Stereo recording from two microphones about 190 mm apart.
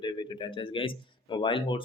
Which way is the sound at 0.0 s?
25° left (ahead or behind).